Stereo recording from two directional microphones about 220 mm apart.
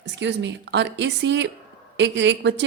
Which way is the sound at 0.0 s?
55° right (ahead or behind).